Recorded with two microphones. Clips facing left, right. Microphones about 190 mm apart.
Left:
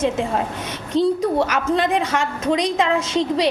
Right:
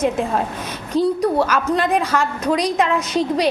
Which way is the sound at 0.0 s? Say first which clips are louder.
Right 1 dB; 25° left (ahead or behind).